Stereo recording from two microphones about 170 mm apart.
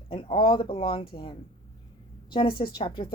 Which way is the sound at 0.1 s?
30° left (ahead or behind).